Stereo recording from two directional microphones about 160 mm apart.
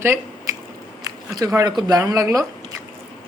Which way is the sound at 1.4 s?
20° right (ahead or behind).